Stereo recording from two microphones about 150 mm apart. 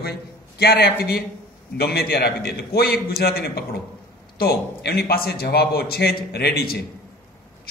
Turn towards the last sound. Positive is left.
turn(degrees=90)